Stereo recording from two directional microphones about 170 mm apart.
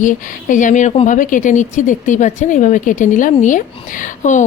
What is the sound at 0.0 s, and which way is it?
A woman's voice, 50° left (ahead or behind).